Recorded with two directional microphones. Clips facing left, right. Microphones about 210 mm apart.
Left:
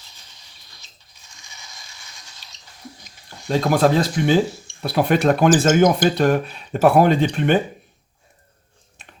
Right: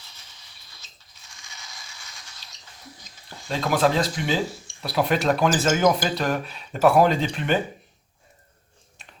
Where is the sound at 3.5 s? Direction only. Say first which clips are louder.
Left 5 dB; 45° left (ahead or behind).